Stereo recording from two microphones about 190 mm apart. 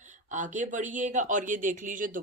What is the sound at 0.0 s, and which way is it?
Speech, 40° right (ahead or behind).